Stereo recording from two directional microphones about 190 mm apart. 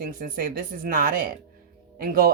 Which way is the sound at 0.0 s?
50° right (ahead or behind).